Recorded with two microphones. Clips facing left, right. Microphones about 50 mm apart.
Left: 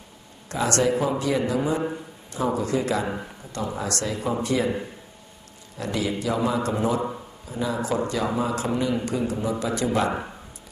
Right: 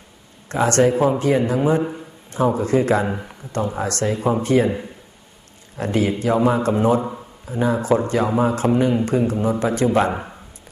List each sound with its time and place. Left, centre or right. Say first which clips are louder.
0.4 s a man's voice: right 6 dB; right
5.7 s a man's voice: right 6 dB; right